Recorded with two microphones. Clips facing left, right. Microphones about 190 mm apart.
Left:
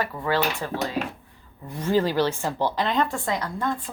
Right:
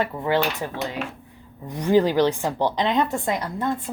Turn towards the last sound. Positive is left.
turn(degrees=-20)  # may be behind; listen again after turning